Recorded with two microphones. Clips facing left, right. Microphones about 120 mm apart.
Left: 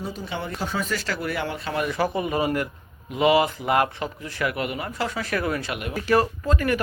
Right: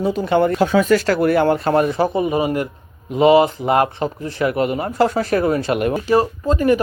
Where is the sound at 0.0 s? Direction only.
75° right (ahead or behind); by 1.9 s 45° right (ahead or behind).